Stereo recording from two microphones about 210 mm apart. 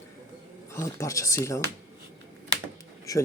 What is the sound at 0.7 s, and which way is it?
Speech, 15° left (ahead or behind).